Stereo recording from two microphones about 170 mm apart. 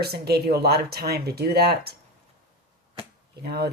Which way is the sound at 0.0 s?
70° right (ahead or behind).